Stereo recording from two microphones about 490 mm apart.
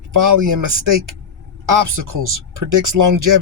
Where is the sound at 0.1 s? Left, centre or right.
Right.